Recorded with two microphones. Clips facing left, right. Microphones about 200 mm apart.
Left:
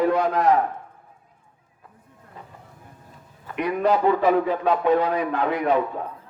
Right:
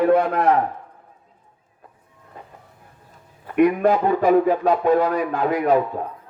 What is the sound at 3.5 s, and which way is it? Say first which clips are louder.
Speech: right 5 dB; 50° right (ahead or behind).